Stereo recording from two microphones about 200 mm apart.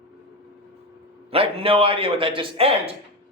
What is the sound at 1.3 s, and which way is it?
Speech, 30° right (ahead or behind).